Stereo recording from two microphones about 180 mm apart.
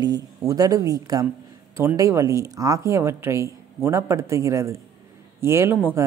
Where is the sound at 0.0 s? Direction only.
20° right (ahead or behind).